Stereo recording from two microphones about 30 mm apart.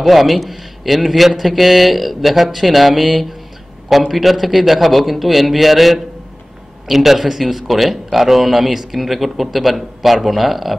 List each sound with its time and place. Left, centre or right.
0.0 s speech: centre